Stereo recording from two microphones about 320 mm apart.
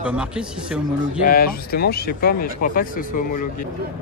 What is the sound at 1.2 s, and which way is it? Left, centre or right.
Speech, left.